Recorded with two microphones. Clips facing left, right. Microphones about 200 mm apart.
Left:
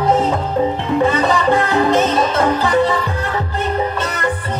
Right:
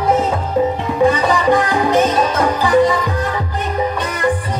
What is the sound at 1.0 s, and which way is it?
Music, 10° right (ahead or behind).